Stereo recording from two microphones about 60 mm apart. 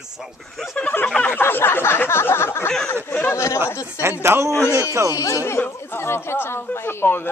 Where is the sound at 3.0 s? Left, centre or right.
Left.